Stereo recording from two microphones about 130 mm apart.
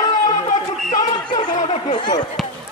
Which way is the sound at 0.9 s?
35° left (ahead or behind).